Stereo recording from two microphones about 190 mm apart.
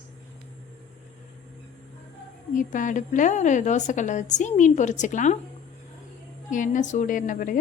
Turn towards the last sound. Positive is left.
turn(degrees=45)  # may be behind; listen again after turning